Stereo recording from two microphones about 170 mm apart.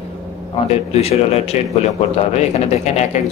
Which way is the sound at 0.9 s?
35° left (ahead or behind).